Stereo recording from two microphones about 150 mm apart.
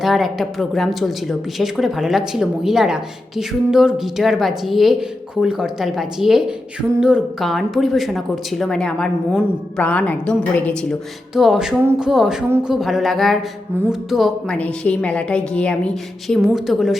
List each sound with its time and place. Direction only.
0.0 s a woman's voice: centre (ahead or behind)
11.3 s a woman's voice: 5° right (ahead or behind)